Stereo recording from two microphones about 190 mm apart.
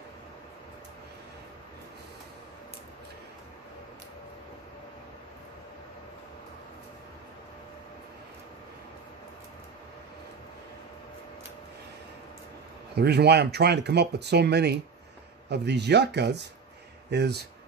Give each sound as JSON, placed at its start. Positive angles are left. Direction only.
{"t": 12.9, "sound": "speech", "side_deg": -60}